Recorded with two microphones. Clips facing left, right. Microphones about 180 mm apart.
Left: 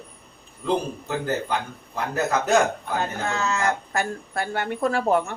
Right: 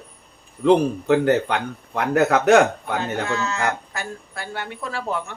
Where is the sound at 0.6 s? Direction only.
70° right (ahead or behind).